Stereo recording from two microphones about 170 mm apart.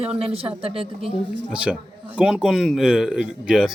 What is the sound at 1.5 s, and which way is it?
Speech, 5° right (ahead or behind).